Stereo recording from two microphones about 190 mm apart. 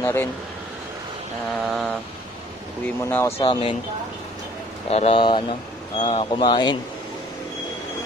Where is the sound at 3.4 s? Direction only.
30° left (ahead or behind).